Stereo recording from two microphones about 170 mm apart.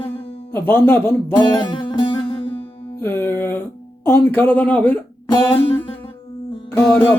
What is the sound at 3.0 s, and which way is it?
Music, 15° left (ahead or behind).